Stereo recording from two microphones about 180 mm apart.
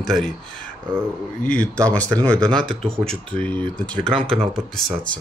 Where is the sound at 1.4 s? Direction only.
5° left (ahead or behind).